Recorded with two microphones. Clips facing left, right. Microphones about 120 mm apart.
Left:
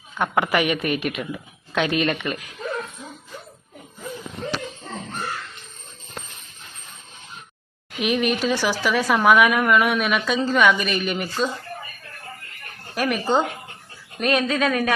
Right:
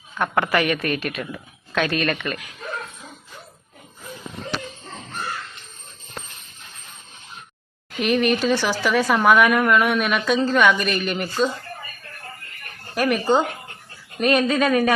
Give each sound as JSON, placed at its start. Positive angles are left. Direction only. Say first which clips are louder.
{"t": 0.2, "sound": "a woman's voice", "louder": "even", "side_deg": 15}
{"t": 7.9, "sound": "speech", "louder": "right 2 dB", "side_deg": 5}
{"t": 12.9, "sound": "speech", "louder": "right 2 dB", "side_deg": 0}